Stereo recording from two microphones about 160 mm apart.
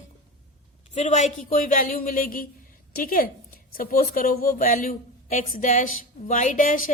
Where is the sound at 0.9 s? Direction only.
50° left (ahead or behind).